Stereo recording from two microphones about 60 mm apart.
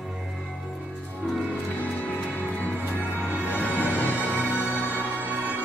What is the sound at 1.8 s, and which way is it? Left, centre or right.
Music, left.